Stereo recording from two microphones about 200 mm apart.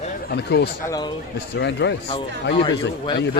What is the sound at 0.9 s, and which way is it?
Speech, 20° left (ahead or behind).